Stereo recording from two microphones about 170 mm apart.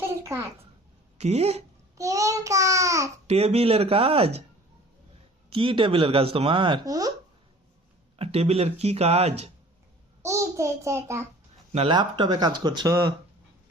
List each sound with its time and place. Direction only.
0.2 s a sound: 15° right (ahead or behind)
1.2 s speech: 40° right (ahead or behind)
2.0 s speech: 20° right (ahead or behind)
3.2 s speech: 35° right (ahead or behind)
5.5 s speech: 30° right (ahead or behind)
8.2 s speech: 35° right (ahead or behind)
10.2 s a child's voice: 15° right (ahead or behind)
11.7 s speech: 30° right (ahead or behind)